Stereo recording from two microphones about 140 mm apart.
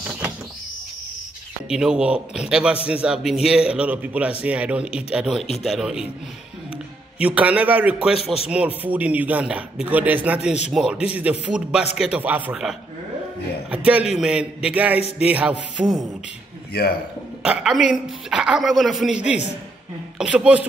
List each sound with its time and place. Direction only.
1.7 s a man's voice: 5° right (ahead or behind)
7.2 s a man's voice: 10° right (ahead or behind)
17.4 s a woman's voice: 5° right (ahead or behind)